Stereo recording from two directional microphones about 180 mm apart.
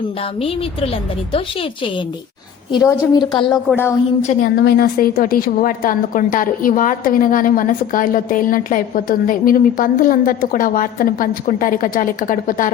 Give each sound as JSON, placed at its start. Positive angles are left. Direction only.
{"t": 0.3, "sound": "a woman's voice", "side_deg": 30}
{"t": 2.7, "sound": "a woman's voice", "side_deg": 25}
{"t": 4.2, "sound": "a woman's voice", "side_deg": 40}
{"t": 4.5, "sound": "a woman's voice", "side_deg": 60}